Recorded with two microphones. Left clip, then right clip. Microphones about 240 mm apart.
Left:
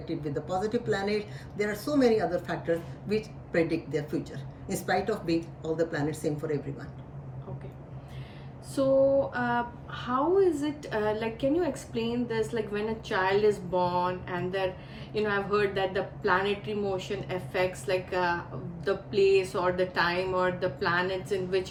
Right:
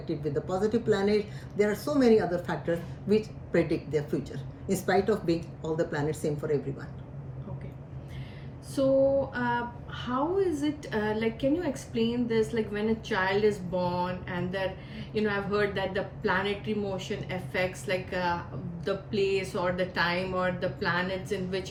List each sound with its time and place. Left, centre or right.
0.3 s speech: centre
8.8 s music: centre
9.3 s a woman's voice: centre